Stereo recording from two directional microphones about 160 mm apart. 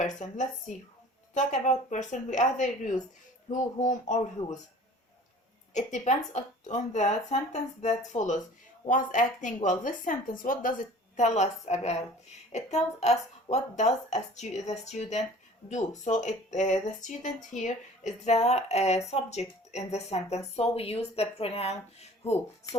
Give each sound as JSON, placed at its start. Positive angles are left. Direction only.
{"t": 0.0, "sound": "speech", "side_deg": 50}
{"t": 5.7, "sound": "speech", "side_deg": 45}